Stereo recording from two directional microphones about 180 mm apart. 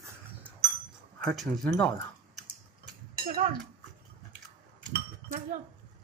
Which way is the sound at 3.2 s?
55° right (ahead or behind).